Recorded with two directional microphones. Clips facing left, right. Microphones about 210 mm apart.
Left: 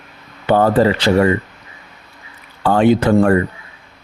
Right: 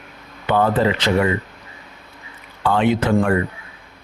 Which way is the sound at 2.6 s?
40° left (ahead or behind).